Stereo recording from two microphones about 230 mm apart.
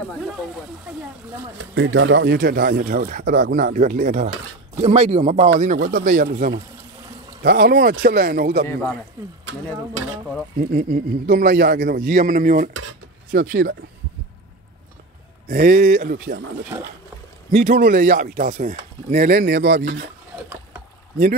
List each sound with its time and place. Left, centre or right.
2.0 s speech: right
10.7 s speech: right
15.4 s speech: right
17.5 s speech: right